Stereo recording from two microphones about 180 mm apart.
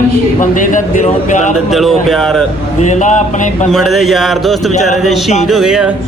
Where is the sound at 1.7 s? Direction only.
Centre (ahead or behind).